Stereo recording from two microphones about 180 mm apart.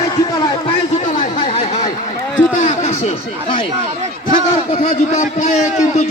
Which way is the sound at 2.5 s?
45° left (ahead or behind).